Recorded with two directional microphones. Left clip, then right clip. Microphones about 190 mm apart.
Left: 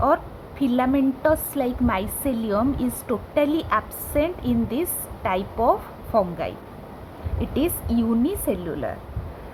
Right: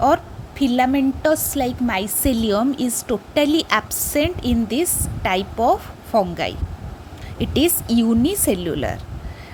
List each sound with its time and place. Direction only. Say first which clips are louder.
0.6 s a woman's voice: right 4 dB; 20° right (ahead or behind); by 8.9 s 40° right (ahead or behind)